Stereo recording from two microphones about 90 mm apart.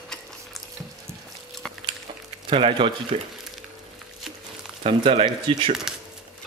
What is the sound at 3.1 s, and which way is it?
Speech, 90° right.